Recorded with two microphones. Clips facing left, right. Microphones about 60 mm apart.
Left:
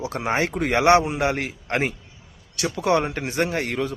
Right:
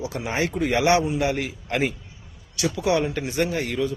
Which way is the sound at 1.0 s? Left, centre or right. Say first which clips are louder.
Even; left.